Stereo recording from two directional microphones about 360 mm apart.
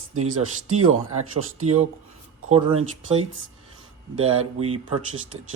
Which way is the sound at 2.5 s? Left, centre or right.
Centre.